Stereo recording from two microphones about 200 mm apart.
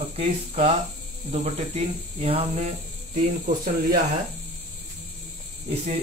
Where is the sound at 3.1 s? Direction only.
45° right (ahead or behind).